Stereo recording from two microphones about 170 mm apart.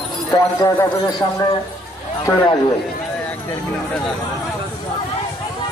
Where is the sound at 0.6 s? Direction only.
20° left (ahead or behind).